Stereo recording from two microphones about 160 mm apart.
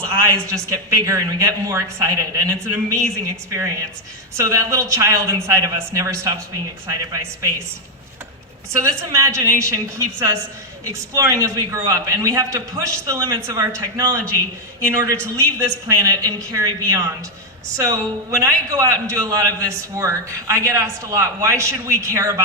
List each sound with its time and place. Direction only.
0.1 s a man's voice: 20° right (ahead or behind)
4.4 s a man's voice: 20° right (ahead or behind)
8.7 s a man's voice: 20° right (ahead or behind)